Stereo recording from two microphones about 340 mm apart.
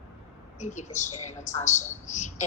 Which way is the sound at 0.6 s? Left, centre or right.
Left.